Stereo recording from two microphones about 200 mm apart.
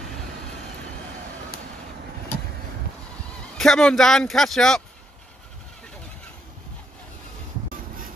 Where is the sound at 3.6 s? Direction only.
Centre (ahead or behind).